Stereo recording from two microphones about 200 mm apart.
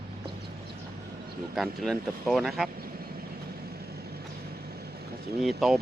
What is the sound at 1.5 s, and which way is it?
Speech, centre (ahead or behind).